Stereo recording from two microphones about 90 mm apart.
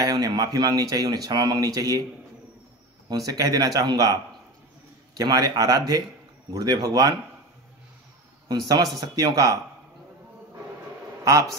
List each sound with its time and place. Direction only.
0.0 s speech: 45° right (ahead or behind)
3.1 s speech: 45° right (ahead or behind)
8.5 s speech: 50° right (ahead or behind)